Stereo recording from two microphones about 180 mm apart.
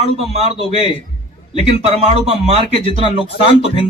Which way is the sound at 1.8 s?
40° right (ahead or behind).